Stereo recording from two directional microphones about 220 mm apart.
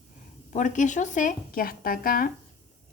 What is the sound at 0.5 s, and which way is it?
A woman's voice, 35° left (ahead or behind).